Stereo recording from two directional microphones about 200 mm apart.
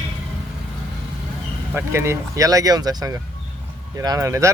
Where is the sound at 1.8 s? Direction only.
10° right (ahead or behind).